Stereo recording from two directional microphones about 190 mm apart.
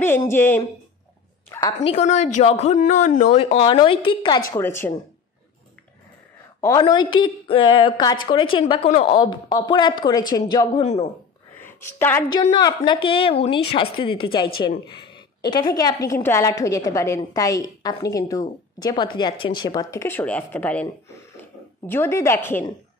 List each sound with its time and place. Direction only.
0.3 s a woman's voice: 10° left (ahead or behind)
1.9 s speech: 35° left (ahead or behind)
4.5 s a woman's voice: 15° left (ahead or behind)
6.6 s a woman's voice: 20° left (ahead or behind)
10.8 s speech: 35° left (ahead or behind)
11.6 s a woman's voice: 10° left (ahead or behind)
12.5 s a woman's voice: 25° left (ahead or behind)